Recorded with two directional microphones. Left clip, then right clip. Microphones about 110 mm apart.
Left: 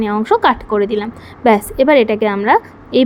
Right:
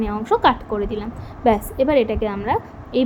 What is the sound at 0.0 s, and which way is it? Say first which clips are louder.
A woman's voice: left 4 dB; 60° left (ahead or behind).